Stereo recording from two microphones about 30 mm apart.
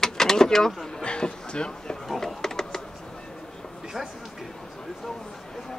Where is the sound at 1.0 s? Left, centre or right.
Left.